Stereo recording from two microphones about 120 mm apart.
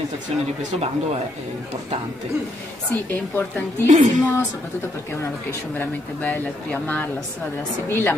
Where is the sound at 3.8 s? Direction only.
90° right.